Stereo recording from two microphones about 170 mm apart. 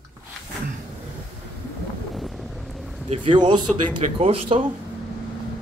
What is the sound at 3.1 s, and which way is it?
A man's voice, 30° right (ahead or behind).